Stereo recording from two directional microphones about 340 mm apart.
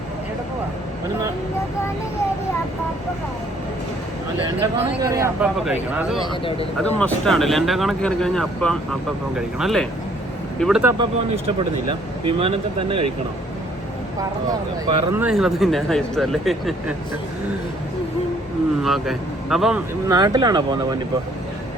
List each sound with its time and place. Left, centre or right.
5.0 s a man's voice: centre
11.9 s a man's voice: centre
14.8 s speech: centre
18.8 s a man's voice: centre